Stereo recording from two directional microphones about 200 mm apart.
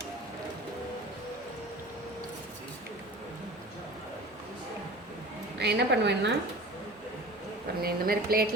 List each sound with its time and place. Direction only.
5.5 s a woman's voice: 55° right (ahead or behind)
7.8 s speech: 50° right (ahead or behind)